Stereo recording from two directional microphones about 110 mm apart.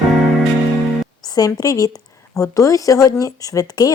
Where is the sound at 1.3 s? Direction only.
35° left (ahead or behind).